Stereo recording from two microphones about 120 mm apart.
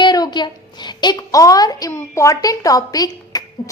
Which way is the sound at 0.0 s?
35° left (ahead or behind).